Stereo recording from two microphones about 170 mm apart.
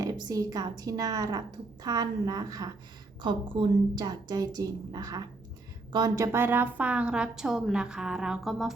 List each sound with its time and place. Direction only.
0.0 s a woman's voice: 20° right (ahead or behind); by 8.7 s centre (ahead or behind)